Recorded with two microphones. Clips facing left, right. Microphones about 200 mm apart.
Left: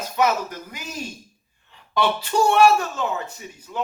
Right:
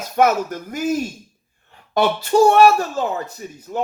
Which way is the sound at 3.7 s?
50° right (ahead or behind).